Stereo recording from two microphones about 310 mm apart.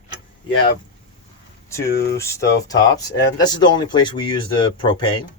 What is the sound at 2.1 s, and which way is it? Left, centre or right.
Speech, centre.